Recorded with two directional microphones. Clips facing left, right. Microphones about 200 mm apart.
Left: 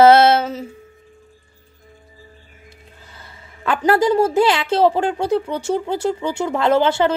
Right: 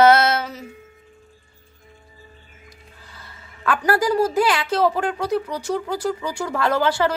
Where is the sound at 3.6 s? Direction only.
25° left (ahead or behind).